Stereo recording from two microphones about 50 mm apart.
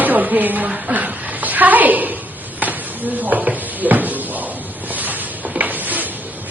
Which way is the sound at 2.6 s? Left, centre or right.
Right.